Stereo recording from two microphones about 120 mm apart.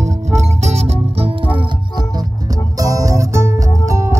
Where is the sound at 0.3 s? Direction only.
65° right (ahead or behind).